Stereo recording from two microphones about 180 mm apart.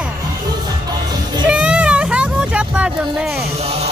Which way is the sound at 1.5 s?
5° right (ahead or behind).